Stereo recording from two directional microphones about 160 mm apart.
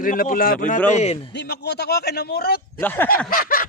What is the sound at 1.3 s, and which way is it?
A man's voice, 90° left.